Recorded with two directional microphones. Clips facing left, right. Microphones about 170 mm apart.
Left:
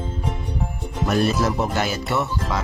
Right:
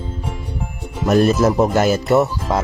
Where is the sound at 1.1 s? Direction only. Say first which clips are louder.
Right 7 dB; 45° right (ahead or behind).